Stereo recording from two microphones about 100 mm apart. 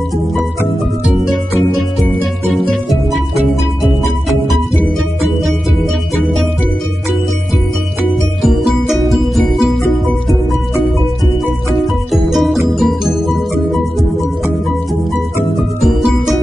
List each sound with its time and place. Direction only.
2.7 s music: centre (ahead or behind)
6.2 s music: 5° left (ahead or behind)
8.4 s music: 5° right (ahead or behind)
11.8 s music: centre (ahead or behind)
15.8 s music: 5° right (ahead or behind)